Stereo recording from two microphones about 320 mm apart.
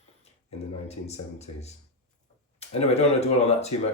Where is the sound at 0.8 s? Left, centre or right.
Centre.